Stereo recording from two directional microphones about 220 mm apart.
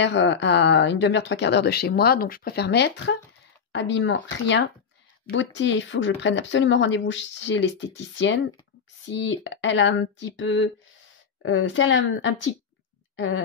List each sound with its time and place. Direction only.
0.0 s speech: 55° left (ahead or behind)